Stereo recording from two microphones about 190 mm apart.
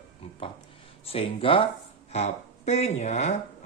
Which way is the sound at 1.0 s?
30° left (ahead or behind).